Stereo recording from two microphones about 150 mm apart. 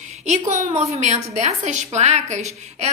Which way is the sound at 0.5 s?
55° right (ahead or behind).